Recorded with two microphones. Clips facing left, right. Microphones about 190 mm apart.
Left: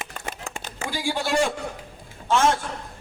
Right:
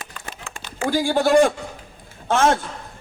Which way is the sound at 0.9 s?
50° right (ahead or behind).